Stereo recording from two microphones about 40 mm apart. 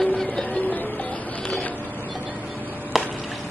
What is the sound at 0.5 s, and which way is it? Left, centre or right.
Music, left.